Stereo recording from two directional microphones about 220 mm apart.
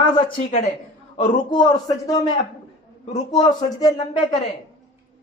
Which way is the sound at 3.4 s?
15° left (ahead or behind).